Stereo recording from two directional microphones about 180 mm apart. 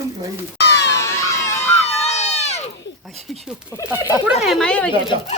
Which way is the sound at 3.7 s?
15° left (ahead or behind).